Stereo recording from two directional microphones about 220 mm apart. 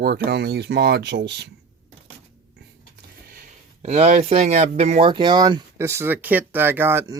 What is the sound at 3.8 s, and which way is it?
Speech, 30° right (ahead or behind).